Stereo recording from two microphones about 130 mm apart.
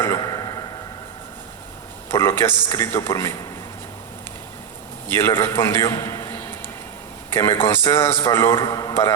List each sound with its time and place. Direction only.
0.0 s a sound: 25° left (ahead or behind)
2.0 s a man's voice: 20° left (ahead or behind)
5.0 s a man's voice: 20° left (ahead or behind)